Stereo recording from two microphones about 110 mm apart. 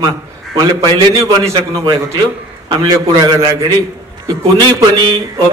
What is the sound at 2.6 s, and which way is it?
Speech, 45° right (ahead or behind).